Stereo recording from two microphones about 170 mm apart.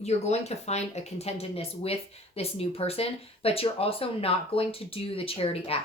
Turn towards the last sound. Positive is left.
turn(degrees=35)  # may be behind; listen again after turning